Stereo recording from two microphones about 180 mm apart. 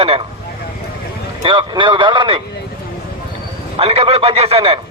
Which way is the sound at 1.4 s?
25° right (ahead or behind).